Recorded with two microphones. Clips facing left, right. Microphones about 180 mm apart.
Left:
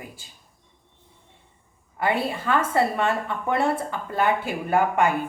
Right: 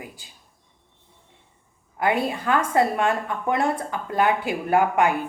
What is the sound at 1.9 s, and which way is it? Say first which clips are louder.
Speech: right 2 dB; 10° right (ahead or behind).